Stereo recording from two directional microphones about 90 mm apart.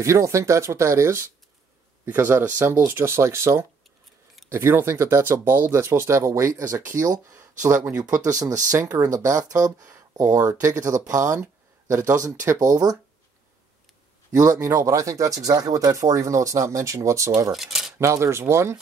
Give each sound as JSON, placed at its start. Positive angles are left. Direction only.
{"t": 0.0, "sound": "speech", "side_deg": -35}
{"t": 14.3, "sound": "speech", "side_deg": -40}
{"t": 17.5, "sound": "a sound", "side_deg": -5}
{"t": 17.9, "sound": "speech", "side_deg": -35}